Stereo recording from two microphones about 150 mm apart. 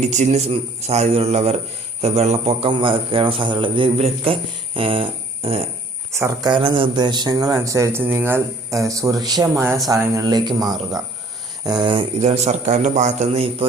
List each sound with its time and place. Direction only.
0.0 s a man's voice: 50° right (ahead or behind)
6.1 s speech: 20° right (ahead or behind)
6.5 s speech: 35° right (ahead or behind)
11.9 s a man's voice: 45° right (ahead or behind)